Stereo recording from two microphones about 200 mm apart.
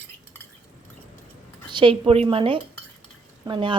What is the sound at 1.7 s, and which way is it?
Speech, 25° right (ahead or behind).